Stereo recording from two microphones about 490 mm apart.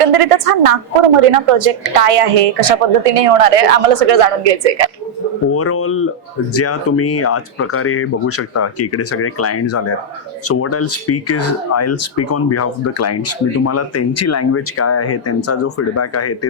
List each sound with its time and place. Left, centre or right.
0.0 s a woman's voice: right
5.5 s speech: left